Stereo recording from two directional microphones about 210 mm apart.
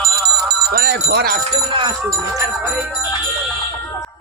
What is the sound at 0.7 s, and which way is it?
Speech, 50° right (ahead or behind).